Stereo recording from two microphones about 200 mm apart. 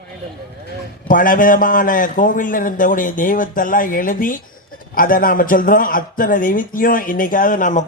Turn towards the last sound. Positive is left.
turn(degrees=40)  # may be behind; listen again after turning